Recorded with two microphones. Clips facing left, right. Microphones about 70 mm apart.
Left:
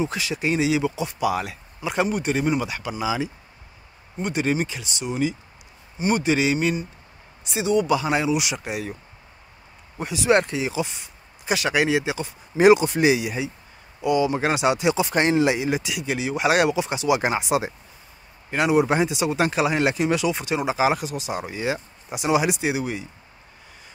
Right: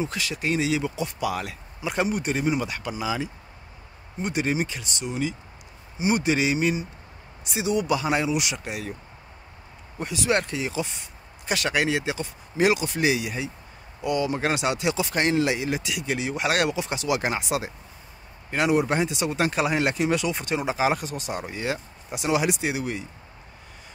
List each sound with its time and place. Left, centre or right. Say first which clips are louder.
0.0 s speech: left 3 dB; centre
1.8 s speech: left 2 dB; centre
4.2 s speech: left 2 dB; centre
5.9 s speech: left 2 dB; centre
9.9 s speech: left 5 dB; centre
12.5 s speech: left 7 dB; left
18.5 s speech: left 3 dB; centre